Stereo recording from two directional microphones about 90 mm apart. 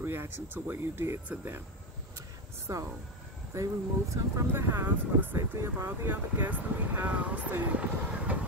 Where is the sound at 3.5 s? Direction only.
35° right (ahead or behind).